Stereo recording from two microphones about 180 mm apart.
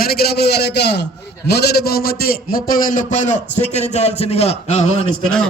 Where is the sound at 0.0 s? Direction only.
60° left (ahead or behind); by 5.0 s 35° left (ahead or behind).